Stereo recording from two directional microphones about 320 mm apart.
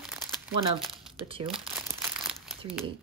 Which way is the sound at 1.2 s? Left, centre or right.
Centre.